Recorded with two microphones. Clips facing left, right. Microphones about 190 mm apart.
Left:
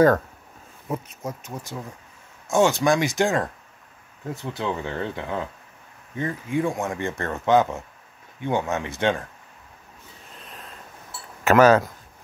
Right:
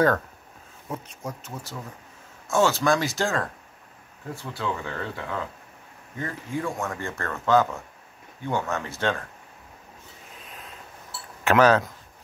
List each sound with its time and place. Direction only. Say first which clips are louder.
0.8 s speech: left 4 dB; 5° left (ahead or behind)
2.5 s speech: left 2 dB; 15° left (ahead or behind)
10.3 s a sound: left 2 dB; 5° right (ahead or behind)
11.4 s speech: left 3 dB; 5° left (ahead or behind)